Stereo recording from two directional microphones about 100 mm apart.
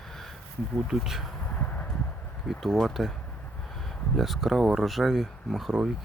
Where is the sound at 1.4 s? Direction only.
20° left (ahead or behind).